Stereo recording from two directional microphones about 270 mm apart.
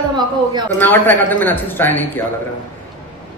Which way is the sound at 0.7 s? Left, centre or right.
Centre.